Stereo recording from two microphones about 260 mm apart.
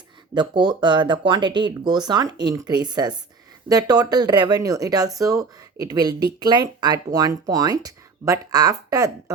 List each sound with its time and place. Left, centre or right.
0.3 s speech: centre